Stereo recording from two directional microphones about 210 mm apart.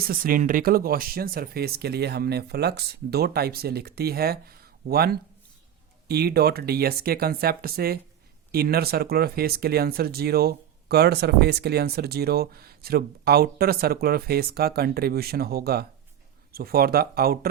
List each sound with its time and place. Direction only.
0.0 s speech: 45° right (ahead or behind)